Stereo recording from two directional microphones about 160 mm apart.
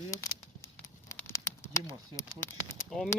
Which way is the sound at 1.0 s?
15° left (ahead or behind).